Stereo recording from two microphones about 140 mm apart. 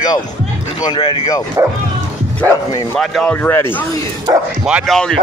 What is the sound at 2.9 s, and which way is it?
Speech, 5° left (ahead or behind).